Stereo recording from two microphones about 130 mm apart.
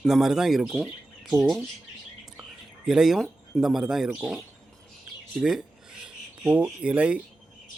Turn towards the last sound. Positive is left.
turn(degrees=-10)  # may be behind; listen again after turning